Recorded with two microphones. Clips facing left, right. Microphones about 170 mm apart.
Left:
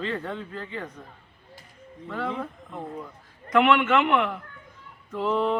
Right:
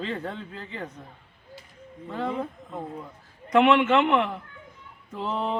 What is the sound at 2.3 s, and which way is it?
Speech, 10° right (ahead or behind).